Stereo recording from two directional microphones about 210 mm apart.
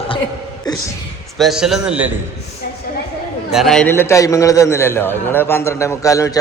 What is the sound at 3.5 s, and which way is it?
A man's voice, centre (ahead or behind).